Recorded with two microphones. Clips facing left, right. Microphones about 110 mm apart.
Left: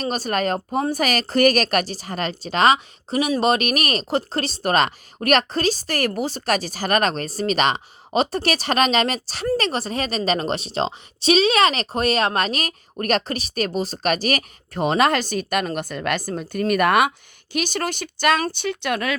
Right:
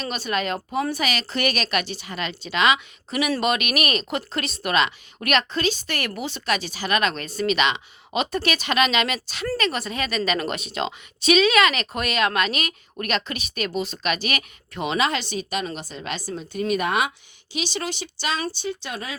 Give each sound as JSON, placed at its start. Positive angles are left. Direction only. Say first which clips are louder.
{"t": 0.0, "sound": "a woman's voice", "louder": "left 4 dB", "side_deg": 40}